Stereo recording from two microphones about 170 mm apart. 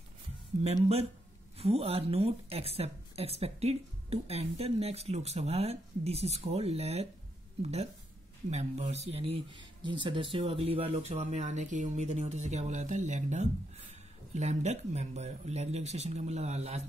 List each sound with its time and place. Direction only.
0.6 s speech: 45° right (ahead or behind)